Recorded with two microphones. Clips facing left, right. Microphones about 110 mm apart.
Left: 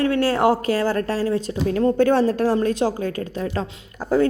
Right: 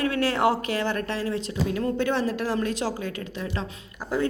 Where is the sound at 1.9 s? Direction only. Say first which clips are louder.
Left 9 dB; 45° left (ahead or behind).